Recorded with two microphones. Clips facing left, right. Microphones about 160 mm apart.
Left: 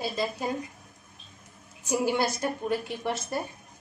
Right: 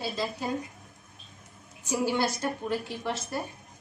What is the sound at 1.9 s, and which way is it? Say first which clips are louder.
A woman's voice: left 1 dB; 15° left (ahead or behind).